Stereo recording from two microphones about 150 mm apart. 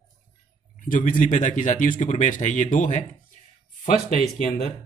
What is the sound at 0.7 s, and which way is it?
Speech, 60° left (ahead or behind).